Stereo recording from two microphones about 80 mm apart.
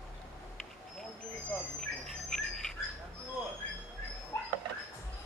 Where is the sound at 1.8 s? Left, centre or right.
Centre.